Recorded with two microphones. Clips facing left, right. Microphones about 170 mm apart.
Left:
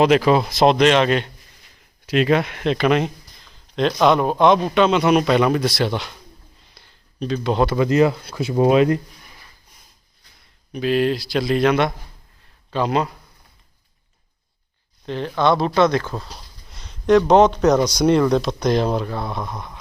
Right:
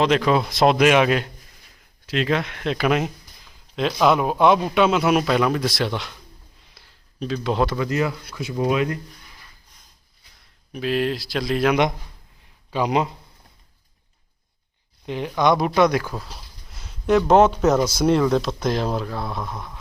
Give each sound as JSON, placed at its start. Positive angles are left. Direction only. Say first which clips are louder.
{"t": 0.0, "sound": "speech", "louder": "left 4 dB", "side_deg": 5}
{"t": 2.0, "sound": "speech", "louder": "left 5 dB", "side_deg": 15}
{"t": 2.7, "sound": "speech", "louder": "left 2 dB", "side_deg": -5}
{"t": 6.7, "sound": "a sound", "louder": "left 2 dB", "side_deg": 0}
{"t": 7.8, "sound": "speech", "louder": "left 7 dB", "side_deg": 25}
{"t": 10.7, "sound": "speech", "louder": "left 4 dB", "side_deg": 0}
{"t": 11.7, "sound": "speech", "louder": "left 1 dB", "side_deg": -15}
{"t": 15.0, "sound": "speech", "louder": "left 1 dB", "side_deg": -10}